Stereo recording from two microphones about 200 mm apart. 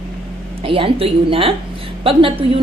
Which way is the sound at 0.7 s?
25° right (ahead or behind).